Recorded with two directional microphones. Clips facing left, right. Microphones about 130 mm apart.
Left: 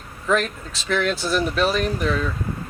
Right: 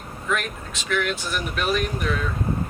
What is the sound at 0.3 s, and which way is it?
Speech, 35° left (ahead or behind).